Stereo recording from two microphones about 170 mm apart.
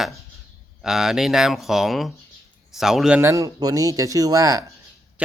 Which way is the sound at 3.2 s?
20° right (ahead or behind).